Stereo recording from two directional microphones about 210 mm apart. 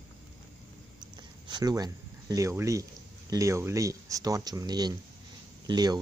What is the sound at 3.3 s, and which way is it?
Speech, 15° right (ahead or behind).